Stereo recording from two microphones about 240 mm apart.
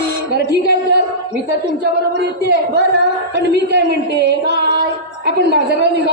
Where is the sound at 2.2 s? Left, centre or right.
Right.